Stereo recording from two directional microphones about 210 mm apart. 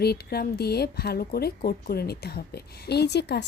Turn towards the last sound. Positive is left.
turn(degrees=55)  # may be behind; listen again after turning